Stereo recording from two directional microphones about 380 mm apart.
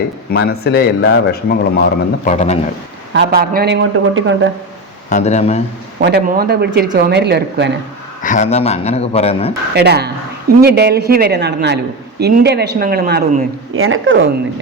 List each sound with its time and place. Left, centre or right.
0.3 s speech: left
3.1 s speech: right
5.0 s speech: centre
6.0 s speech: right
8.2 s speech: centre
9.7 s speech: right